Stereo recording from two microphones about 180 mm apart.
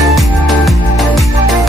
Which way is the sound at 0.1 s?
Centre (ahead or behind).